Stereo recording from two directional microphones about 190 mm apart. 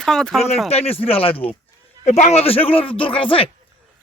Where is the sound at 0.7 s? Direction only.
30° left (ahead or behind).